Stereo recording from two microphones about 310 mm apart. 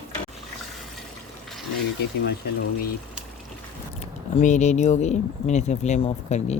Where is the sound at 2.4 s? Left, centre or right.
Left.